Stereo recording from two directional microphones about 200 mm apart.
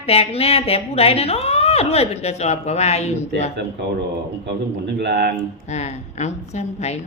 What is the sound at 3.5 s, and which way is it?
Speech, 60° right (ahead or behind).